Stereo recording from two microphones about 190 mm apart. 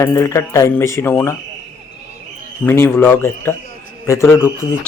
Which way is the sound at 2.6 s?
10° left (ahead or behind).